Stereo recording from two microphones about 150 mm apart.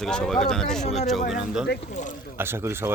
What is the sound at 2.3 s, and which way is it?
Speech, 15° right (ahead or behind).